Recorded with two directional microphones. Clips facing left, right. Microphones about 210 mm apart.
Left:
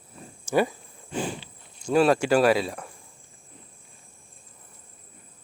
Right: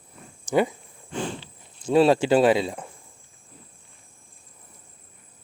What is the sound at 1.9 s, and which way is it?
Speech, 25° right (ahead or behind).